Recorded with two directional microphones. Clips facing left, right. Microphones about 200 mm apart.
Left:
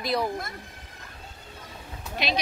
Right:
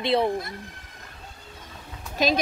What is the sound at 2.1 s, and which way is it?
Speech, 45° right (ahead or behind).